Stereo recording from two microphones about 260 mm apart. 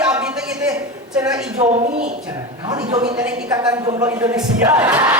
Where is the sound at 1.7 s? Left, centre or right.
Right.